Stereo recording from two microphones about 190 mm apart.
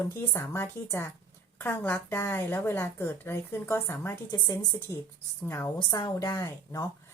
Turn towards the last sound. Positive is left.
turn(degrees=15)  # may be behind; listen again after turning